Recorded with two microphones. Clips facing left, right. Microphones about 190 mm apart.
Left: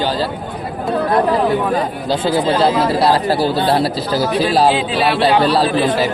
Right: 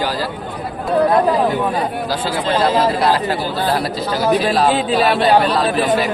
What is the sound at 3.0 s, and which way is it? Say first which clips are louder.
Speech: left 3 dB; 35° left (ahead or behind).